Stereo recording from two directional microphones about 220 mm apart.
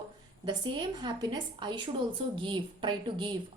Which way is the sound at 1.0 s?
20° right (ahead or behind).